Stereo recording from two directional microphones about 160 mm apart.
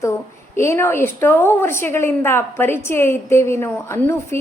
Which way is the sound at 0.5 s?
15° left (ahead or behind).